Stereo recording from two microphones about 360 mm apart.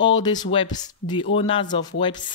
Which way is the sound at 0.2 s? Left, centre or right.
Centre.